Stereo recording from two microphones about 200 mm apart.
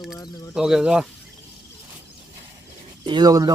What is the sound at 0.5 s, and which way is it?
Speech, 5° right (ahead or behind).